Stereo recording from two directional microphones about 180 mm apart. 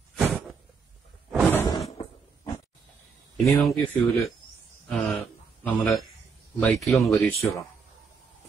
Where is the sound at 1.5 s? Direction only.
15° left (ahead or behind).